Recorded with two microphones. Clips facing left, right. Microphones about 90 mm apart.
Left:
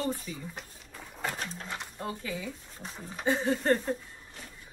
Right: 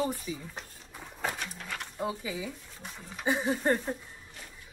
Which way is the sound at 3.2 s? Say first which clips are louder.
Even; 15° right (ahead or behind).